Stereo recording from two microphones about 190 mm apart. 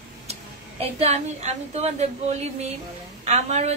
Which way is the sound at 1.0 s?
35° right (ahead or behind).